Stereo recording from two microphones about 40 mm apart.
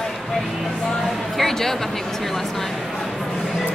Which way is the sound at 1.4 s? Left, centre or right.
Centre.